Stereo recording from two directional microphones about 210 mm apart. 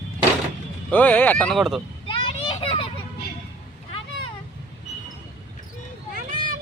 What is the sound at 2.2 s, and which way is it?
Children playing, 25° left (ahead or behind).